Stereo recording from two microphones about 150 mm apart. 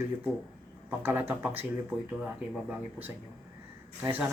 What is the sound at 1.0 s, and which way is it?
Speech, 15° right (ahead or behind).